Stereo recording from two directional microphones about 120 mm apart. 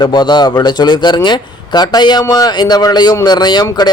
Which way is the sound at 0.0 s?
35° left (ahead or behind).